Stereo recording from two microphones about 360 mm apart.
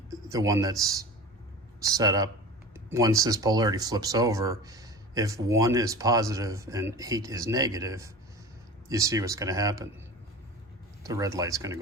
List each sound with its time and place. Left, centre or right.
0.1 s speech: centre
11.0 s speech: centre